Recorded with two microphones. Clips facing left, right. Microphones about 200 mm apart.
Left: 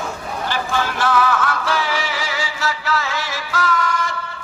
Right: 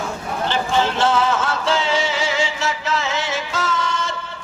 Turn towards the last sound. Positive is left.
turn(degrees=-25)  # may be behind; listen again after turning